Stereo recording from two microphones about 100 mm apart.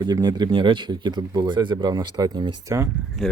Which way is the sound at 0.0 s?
45° right (ahead or behind).